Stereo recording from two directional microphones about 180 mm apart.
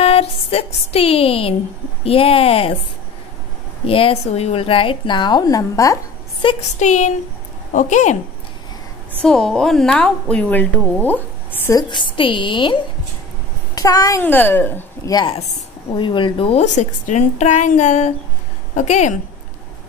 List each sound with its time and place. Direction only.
0.0 s music: 35° left (ahead or behind)
2.0 s a woman's voice: 30° left (ahead or behind)
3.8 s speech: 30° left (ahead or behind)
6.4 s speech: 30° left (ahead or behind)
6.8 s a woman's voice: 40° left (ahead or behind)
9.2 s a woman's voice: centre (ahead or behind)
11.9 s a woman's voice: 25° left (ahead or behind); by 15.1 s 10° left (ahead or behind)
15.1 s a woman's voice: 30° left (ahead or behind)